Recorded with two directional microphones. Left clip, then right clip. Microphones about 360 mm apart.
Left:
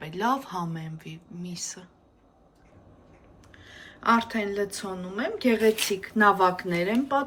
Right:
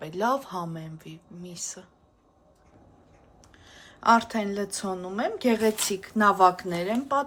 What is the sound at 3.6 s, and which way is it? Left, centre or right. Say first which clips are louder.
Speech: right 2 dB; centre.